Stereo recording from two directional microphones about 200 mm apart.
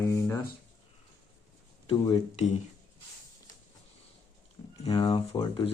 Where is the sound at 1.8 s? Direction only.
20° left (ahead or behind).